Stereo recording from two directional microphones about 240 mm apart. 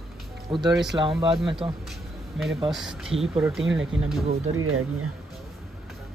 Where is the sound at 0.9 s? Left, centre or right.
Centre.